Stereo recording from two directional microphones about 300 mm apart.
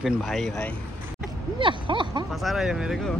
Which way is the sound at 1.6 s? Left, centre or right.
Centre.